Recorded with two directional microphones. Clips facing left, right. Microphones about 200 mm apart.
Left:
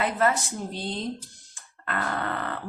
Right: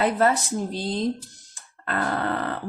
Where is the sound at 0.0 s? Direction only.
35° right (ahead or behind).